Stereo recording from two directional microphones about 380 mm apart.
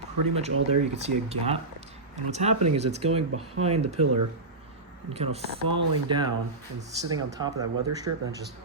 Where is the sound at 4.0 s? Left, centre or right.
Right.